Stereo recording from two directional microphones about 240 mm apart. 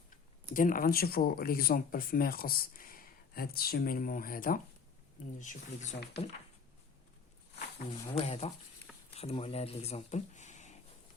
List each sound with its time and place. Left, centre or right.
0.5 s speech: left
7.8 s speech: left